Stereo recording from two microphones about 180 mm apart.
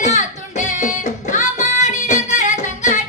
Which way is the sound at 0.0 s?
40° left (ahead or behind).